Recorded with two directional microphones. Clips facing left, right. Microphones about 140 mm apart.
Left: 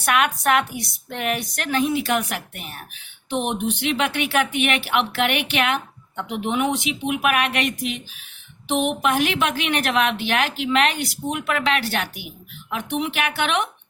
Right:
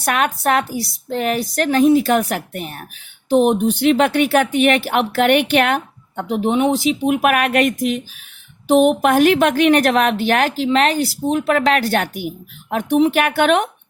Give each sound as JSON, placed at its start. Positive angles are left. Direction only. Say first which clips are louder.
{"t": 0.0, "sound": "a woman's voice", "louder": "right 2 dB", "side_deg": -40}